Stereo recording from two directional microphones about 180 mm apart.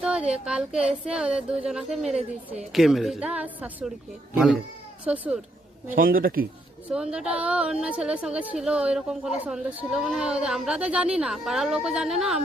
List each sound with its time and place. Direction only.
0.0 s speech: 5° right (ahead or behind)
5.0 s a woman's voice: 5° right (ahead or behind)
5.9 s speech: 50° right (ahead or behind)
6.9 s a woman's voice: 5° right (ahead or behind)